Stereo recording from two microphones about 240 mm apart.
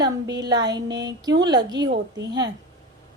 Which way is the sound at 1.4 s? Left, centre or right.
Centre.